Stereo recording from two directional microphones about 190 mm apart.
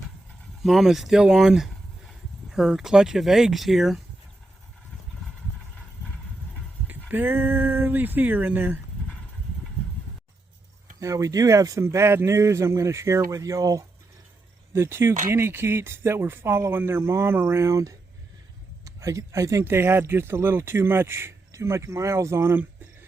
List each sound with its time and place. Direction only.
0.6 s speech: centre (ahead or behind)
6.8 s speech: 10° right (ahead or behind)
11.0 s speech: 15° right (ahead or behind)